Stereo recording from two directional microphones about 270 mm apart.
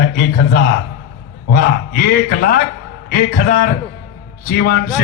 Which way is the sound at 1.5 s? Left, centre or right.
Left.